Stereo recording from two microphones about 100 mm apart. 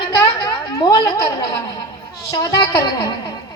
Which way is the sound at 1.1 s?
35° left (ahead or behind).